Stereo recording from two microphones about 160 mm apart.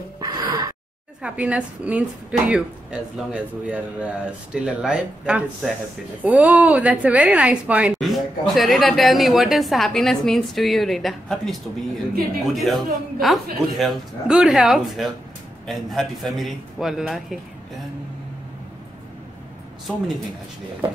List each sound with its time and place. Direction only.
0.2 s gasp: 25° right (ahead or behind)
1.2 s a woman's voice: 5° right (ahead or behind)